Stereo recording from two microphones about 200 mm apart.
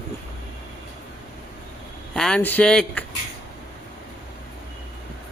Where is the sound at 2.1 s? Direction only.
5° left (ahead or behind).